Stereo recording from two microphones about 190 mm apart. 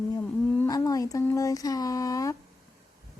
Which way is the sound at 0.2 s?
10° left (ahead or behind).